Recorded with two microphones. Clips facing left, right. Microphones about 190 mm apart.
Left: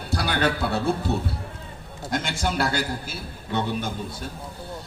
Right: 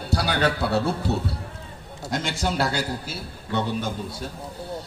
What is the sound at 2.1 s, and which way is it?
Speech, 50° left (ahead or behind).